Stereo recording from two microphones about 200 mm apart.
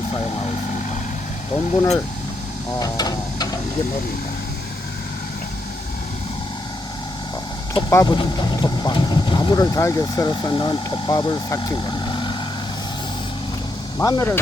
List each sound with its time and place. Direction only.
1.7 s speech: 25° left (ahead or behind)
7.7 s speech: 20° left (ahead or behind)
14.0 s speech: 15° left (ahead or behind)